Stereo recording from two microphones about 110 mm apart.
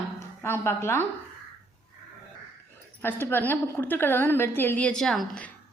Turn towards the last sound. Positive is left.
turn(degrees=5)  # may be behind; listen again after turning